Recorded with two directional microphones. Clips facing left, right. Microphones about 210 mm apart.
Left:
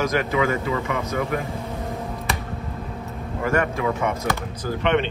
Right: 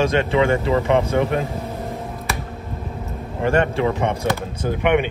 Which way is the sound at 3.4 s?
30° right (ahead or behind).